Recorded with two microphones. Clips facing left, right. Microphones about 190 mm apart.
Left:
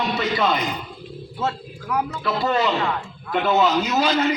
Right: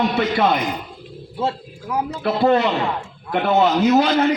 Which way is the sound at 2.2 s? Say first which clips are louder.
Right 6 dB; 55° right (ahead or behind).